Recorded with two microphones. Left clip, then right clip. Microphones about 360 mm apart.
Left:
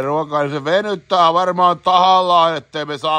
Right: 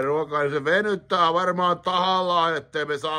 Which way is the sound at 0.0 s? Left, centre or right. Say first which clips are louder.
Left 5 dB; centre.